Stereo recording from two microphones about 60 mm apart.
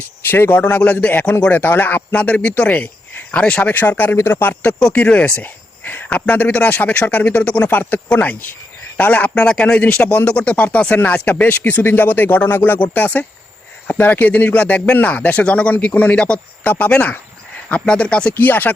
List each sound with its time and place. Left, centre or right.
0.3 s speech: left
0.6 s speech: left
4.8 s speech: centre
7.7 s speech: left; by 18.3 s centre
18.3 s speech: left